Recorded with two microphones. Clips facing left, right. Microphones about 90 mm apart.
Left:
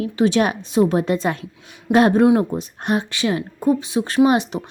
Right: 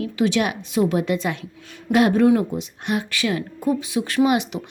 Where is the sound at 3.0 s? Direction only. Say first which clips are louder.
Left 2 dB; 30° left (ahead or behind).